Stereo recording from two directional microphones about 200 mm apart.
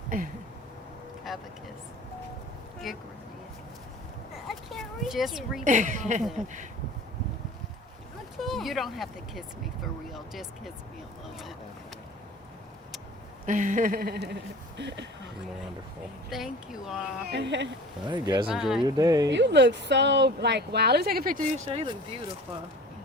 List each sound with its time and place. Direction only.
0.1 s a sound: 45° right (ahead or behind)
1.3 s vehicle: centre (ahead or behind)
2.8 s speech: centre (ahead or behind)
4.4 s a sound: centre (ahead or behind)
5.6 s a woman's voice: 40° right (ahead or behind)
8.4 s speech: centre (ahead or behind)
13.4 s a sound: 40° right (ahead or behind)
14.8 s speech: 60° right (ahead or behind)
16.3 s speech: centre (ahead or behind)
17.2 s speech: 60° right (ahead or behind)
18.1 s speech: 20° right (ahead or behind)
18.4 s speech: centre (ahead or behind)
18.9 s speech: 20° right (ahead or behind)
19.3 s speech: 60° right (ahead or behind); by 22.2 s 25° right (ahead or behind)